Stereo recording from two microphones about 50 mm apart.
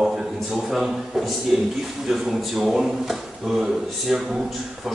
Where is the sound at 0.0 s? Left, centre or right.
Centre.